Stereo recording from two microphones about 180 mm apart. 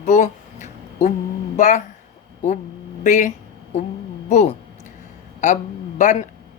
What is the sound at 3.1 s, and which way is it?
Speech, 40° left (ahead or behind).